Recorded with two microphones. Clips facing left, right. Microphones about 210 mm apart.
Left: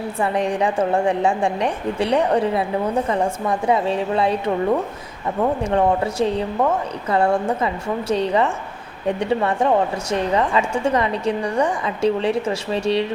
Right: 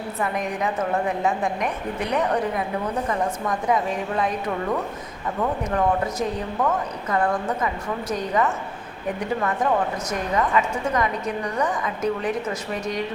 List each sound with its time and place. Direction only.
0.2 s a woman's voice: 30° left (ahead or behind)